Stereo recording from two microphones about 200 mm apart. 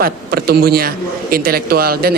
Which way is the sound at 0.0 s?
50° right (ahead or behind).